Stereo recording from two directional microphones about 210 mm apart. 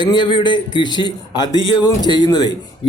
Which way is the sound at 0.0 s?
20° left (ahead or behind).